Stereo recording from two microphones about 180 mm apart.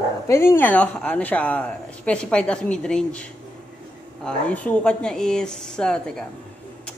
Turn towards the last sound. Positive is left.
turn(degrees=5)  # may be behind; listen again after turning